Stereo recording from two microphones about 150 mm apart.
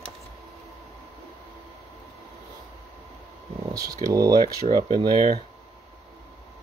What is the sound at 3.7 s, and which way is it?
Speech, 25° right (ahead or behind).